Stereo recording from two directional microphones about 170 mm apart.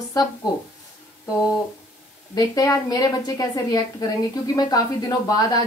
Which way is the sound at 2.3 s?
20° left (ahead or behind).